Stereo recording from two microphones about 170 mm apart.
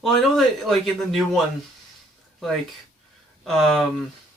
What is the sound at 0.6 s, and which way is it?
Speech, centre (ahead or behind).